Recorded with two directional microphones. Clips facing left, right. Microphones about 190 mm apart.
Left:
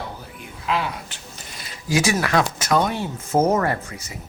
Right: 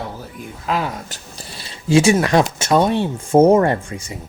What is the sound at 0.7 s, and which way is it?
Speech, 40° right (ahead or behind).